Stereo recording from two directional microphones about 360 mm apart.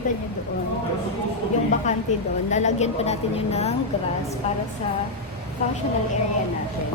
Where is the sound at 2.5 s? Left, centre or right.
Centre.